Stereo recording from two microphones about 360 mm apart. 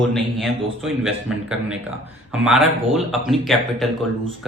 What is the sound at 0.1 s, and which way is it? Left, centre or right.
Speech, centre.